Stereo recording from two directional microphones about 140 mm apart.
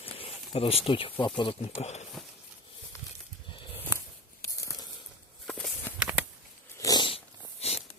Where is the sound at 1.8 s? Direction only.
50° left (ahead or behind).